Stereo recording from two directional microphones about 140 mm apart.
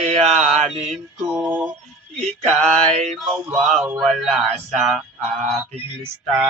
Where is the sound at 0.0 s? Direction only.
50° right (ahead or behind).